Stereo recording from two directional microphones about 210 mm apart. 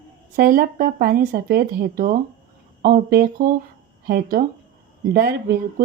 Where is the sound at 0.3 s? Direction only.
45° right (ahead or behind).